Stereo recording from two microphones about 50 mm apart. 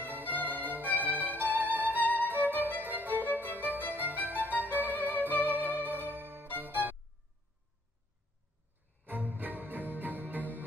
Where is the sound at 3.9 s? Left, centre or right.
Right.